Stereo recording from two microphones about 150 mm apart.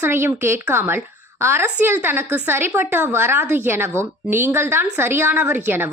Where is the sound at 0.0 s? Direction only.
15° right (ahead or behind).